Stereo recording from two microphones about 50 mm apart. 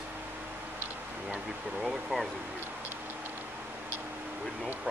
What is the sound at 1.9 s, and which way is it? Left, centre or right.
Speech, centre.